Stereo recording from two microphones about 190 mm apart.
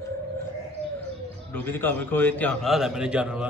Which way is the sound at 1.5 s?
10° left (ahead or behind).